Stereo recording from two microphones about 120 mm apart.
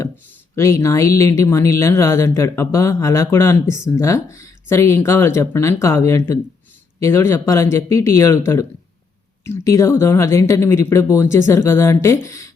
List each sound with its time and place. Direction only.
0.5 s speech: 25° left (ahead or behind)